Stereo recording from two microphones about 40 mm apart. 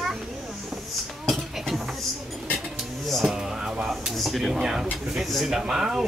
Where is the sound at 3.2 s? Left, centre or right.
Centre.